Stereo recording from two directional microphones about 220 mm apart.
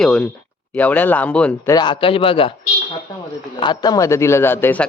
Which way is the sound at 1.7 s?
20° left (ahead or behind).